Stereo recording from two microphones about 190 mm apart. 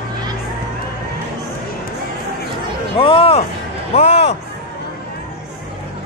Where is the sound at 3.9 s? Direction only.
35° left (ahead or behind).